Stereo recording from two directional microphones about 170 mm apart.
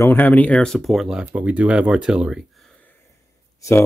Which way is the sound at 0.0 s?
10° left (ahead or behind).